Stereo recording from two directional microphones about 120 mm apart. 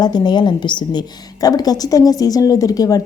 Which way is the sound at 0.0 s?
35° left (ahead or behind).